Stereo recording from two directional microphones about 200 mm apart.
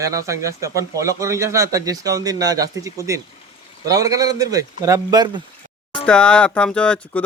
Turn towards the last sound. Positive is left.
turn(degrees=5)  # may be behind; listen again after turning